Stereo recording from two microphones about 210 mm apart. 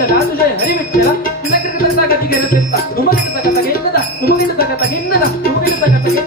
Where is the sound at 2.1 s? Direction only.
45° left (ahead or behind).